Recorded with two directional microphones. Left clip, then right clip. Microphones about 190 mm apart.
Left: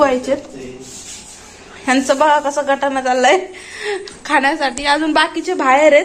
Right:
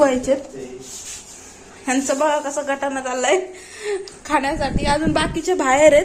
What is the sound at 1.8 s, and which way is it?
A woman's voice, 10° right (ahead or behind).